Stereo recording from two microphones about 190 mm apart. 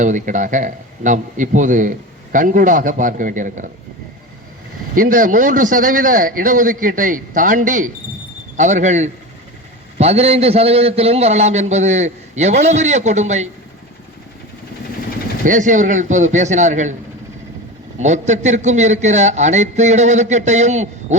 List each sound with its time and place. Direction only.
0.0 s a man's voice: 40° right (ahead or behind)
4.9 s a man's voice: 45° right (ahead or behind)
15.4 s a man's voice: 40° right (ahead or behind)
18.0 s a man's voice: 40° right (ahead or behind)